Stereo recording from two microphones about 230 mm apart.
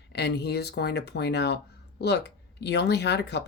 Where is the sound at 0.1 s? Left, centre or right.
Left.